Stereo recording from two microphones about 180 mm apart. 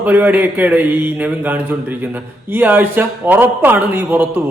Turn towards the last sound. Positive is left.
turn(degrees=-10)  # may be behind; listen again after turning